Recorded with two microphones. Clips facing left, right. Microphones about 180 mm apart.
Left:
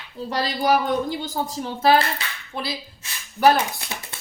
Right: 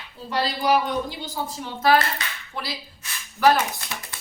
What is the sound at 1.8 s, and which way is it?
Speech, 25° left (ahead or behind).